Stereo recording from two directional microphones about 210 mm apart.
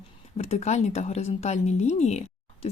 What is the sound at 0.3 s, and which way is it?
Speech, 30° left (ahead or behind).